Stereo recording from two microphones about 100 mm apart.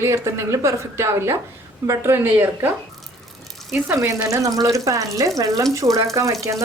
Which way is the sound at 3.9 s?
30° right (ahead or behind).